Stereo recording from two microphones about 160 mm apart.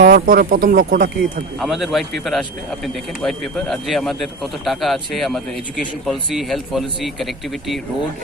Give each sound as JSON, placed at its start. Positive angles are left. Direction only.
{"t": 0.0, "sound": "speech", "side_deg": -70}
{"t": 1.5, "sound": "a man's voice", "side_deg": 0}